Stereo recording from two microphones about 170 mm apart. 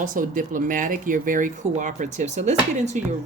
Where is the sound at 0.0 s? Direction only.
50° right (ahead or behind).